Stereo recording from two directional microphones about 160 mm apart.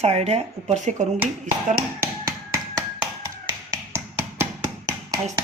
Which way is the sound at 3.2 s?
20° right (ahead or behind).